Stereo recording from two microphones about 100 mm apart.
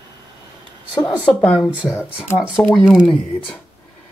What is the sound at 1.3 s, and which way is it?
Speech, 10° left (ahead or behind).